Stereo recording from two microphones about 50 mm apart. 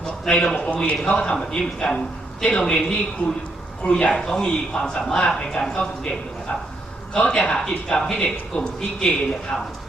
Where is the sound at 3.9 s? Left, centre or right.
Centre.